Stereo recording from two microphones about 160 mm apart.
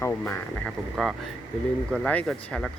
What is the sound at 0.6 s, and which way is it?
Speech, centre (ahead or behind).